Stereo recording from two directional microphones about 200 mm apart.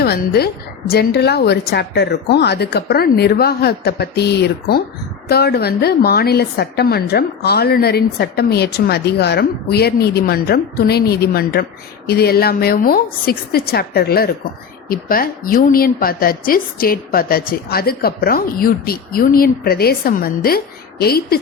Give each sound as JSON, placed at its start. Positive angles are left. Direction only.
{"t": 0.0, "sound": "a woman's voice", "side_deg": 50}